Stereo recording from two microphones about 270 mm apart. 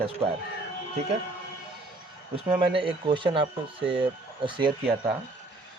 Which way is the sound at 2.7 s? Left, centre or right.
Centre.